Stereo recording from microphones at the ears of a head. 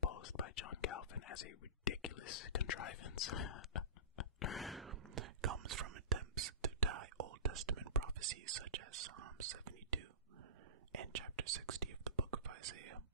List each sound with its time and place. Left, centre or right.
0.0 s whispering: left
4.9 s whispering: right